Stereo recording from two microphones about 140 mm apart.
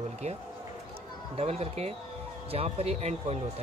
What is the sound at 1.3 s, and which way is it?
Speech, 45° right (ahead or behind).